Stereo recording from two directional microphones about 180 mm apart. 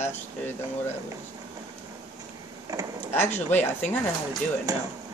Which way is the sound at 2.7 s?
20° right (ahead or behind).